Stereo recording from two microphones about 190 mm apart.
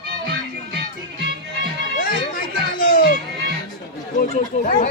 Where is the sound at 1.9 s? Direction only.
50° left (ahead or behind).